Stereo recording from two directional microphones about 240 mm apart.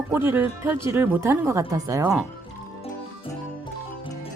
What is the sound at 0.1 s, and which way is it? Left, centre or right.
A woman's voice, centre.